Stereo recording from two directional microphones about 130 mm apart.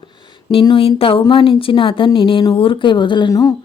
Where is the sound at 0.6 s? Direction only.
40° left (ahead or behind).